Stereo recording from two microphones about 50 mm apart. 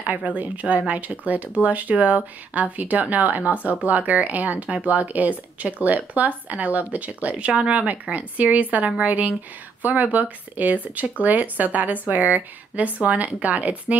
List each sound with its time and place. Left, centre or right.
0.0 s speech: right